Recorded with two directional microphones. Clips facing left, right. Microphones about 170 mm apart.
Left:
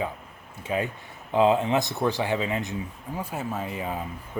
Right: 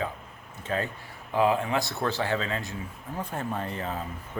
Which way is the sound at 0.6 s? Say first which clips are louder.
Left 2 dB; 10° left (ahead or behind).